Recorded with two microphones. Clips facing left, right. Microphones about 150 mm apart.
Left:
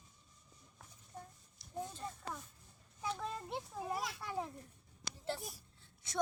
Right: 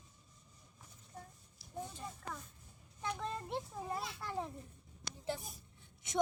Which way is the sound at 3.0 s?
5° left (ahead or behind).